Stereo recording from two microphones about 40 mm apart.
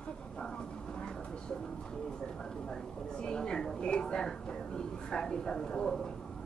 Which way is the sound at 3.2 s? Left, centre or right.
Centre.